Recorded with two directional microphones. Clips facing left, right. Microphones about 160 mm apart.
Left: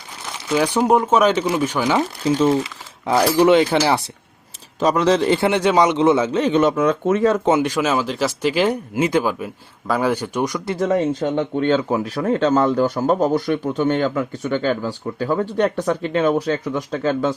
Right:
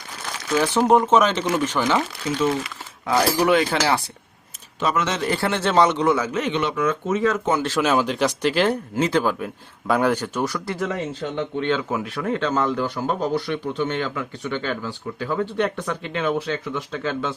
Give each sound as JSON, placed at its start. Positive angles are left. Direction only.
{"t": 0.4, "sound": "speech", "side_deg": 15}
{"t": 2.0, "sound": "speech", "side_deg": 30}
{"t": 3.1, "sound": "speech", "side_deg": 25}
{"t": 4.8, "sound": "speech", "side_deg": 35}
{"t": 5.3, "sound": "speech", "side_deg": 20}
{"t": 6.5, "sound": "speech", "side_deg": 45}
{"t": 7.3, "sound": "speech", "side_deg": 30}
{"t": 7.6, "sound": "speech", "side_deg": 15}
{"t": 7.9, "sound": "speech", "side_deg": 0}
{"t": 10.8, "sound": "speech", "side_deg": 40}